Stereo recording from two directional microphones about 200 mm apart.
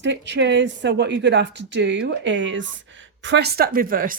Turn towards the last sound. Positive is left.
turn(degrees=-45)  # may be behind; listen again after turning